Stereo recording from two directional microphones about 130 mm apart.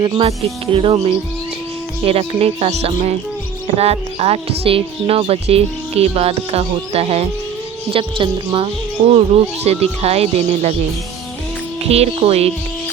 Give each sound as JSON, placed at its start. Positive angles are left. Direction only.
{"t": 0.0, "sound": "speech", "side_deg": -45}
{"t": 11.8, "sound": "speech", "side_deg": -50}